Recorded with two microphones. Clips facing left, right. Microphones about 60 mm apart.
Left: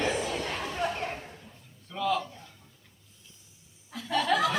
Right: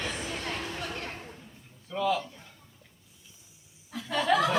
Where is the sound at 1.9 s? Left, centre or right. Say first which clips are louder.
Right 1 dB; centre.